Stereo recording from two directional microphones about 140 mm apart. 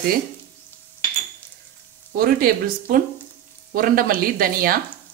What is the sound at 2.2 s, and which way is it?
Speech, 90° right.